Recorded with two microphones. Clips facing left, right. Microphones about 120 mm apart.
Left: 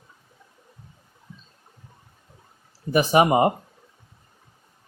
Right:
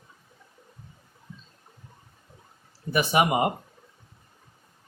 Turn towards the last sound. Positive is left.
turn(degrees=35)  # may be behind; listen again after turning